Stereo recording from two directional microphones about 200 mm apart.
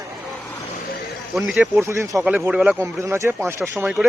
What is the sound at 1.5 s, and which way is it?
Speech, centre (ahead or behind).